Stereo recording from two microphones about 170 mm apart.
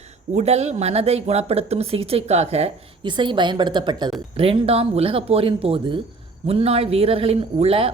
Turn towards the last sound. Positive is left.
turn(degrees=-35)  # may be behind; listen again after turning